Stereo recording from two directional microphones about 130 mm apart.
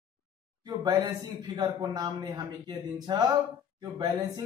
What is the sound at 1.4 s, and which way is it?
Speech, 30° right (ahead or behind).